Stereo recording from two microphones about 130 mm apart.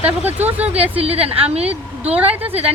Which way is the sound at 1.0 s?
50° right (ahead or behind).